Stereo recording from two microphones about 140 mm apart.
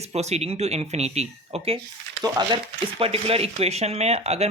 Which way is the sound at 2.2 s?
30° right (ahead or behind).